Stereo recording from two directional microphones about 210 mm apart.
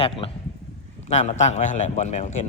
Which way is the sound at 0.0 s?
25° left (ahead or behind).